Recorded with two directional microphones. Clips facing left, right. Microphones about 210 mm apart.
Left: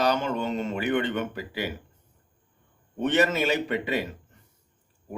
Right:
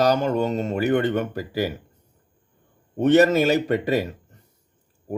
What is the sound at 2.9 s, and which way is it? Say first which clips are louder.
Speech: right 8 dB; 40° right (ahead or behind).